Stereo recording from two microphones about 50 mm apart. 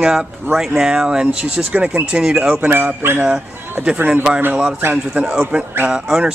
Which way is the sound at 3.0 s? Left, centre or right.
Right.